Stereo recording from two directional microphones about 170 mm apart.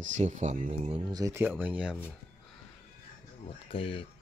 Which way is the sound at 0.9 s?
20° right (ahead or behind).